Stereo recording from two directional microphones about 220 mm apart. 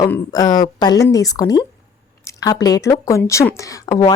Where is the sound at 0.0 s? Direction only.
15° left (ahead or behind).